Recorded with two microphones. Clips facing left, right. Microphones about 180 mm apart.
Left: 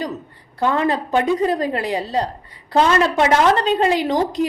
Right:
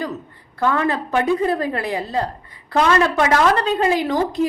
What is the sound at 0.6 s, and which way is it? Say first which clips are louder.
A woman's voice: left 1 dB; 20° left (ahead or behind).